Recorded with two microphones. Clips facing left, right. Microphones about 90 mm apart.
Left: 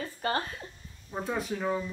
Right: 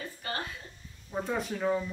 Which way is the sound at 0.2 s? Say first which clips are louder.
Left 7 dB; 40° left (ahead or behind).